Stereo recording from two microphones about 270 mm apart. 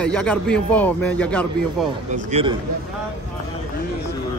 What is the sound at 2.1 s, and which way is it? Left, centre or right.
Speech, right.